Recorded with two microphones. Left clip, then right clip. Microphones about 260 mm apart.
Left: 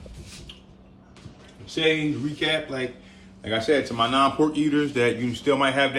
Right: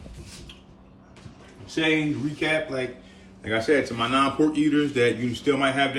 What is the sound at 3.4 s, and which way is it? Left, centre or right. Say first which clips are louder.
Speech: even; left.